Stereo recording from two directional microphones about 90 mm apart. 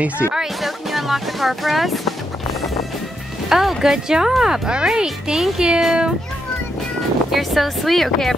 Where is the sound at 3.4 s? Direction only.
5° right (ahead or behind).